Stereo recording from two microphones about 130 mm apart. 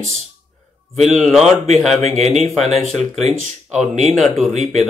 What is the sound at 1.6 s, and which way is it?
Speech, 60° right (ahead or behind).